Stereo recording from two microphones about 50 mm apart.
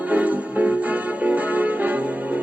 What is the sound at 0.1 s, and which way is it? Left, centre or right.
Music, right.